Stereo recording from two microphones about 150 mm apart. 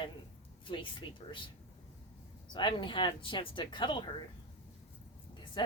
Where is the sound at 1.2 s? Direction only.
35° left (ahead or behind).